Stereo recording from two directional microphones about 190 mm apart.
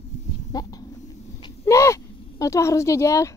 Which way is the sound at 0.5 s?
20° left (ahead or behind).